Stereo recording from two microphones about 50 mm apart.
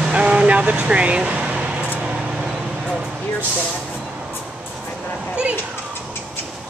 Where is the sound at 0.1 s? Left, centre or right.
Right.